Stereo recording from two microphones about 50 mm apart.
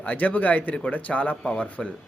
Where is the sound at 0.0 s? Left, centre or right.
Left.